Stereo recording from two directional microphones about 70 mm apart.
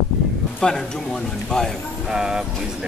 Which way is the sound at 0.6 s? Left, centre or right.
Centre.